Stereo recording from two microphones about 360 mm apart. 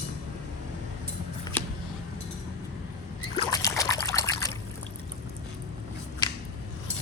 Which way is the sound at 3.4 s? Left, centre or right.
Centre.